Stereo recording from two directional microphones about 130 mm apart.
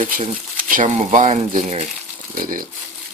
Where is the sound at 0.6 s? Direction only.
80° right.